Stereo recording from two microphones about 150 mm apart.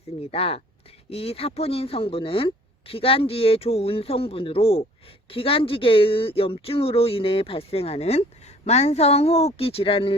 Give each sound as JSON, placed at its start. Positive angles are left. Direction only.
{"t": 0.2, "sound": "speech", "side_deg": 40}